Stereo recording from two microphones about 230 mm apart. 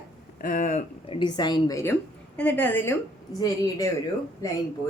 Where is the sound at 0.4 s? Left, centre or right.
Left; by 2.9 s centre.